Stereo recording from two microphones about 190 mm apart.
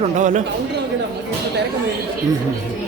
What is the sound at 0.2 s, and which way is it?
Speech, 40° right (ahead or behind).